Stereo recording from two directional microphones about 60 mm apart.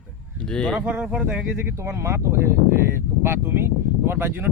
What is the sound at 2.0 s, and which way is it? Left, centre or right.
Speech, right.